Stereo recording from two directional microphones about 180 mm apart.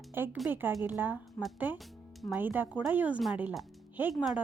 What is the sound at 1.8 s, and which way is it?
Music, centre (ahead or behind).